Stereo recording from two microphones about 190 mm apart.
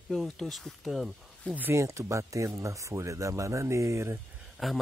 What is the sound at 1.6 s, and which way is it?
Speech, 15° right (ahead or behind).